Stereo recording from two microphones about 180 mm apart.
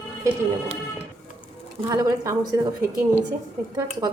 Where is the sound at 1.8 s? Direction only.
20° right (ahead or behind).